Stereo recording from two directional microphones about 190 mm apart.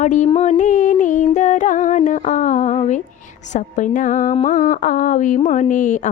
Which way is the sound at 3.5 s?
40° left (ahead or behind).